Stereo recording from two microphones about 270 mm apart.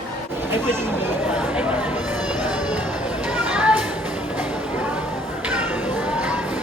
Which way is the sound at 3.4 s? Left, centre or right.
Centre.